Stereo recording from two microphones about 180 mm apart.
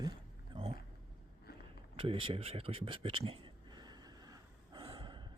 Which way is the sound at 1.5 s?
60° left (ahead or behind).